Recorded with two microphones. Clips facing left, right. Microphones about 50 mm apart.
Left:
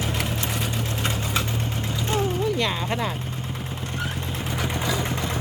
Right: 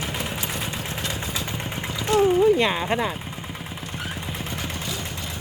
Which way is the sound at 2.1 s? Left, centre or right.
Left.